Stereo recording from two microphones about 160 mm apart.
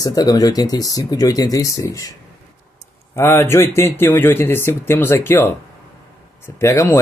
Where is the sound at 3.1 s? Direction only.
15° left (ahead or behind).